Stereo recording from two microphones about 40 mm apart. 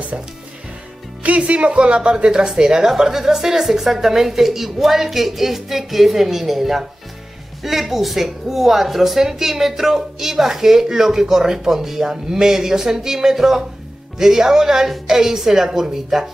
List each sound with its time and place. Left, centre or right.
1.4 s speech: right; by 16.3 s centre